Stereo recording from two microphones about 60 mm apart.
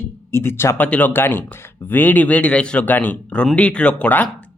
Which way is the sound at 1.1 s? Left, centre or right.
Left.